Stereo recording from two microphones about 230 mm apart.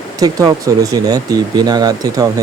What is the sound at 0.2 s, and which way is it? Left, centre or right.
Speech, centre.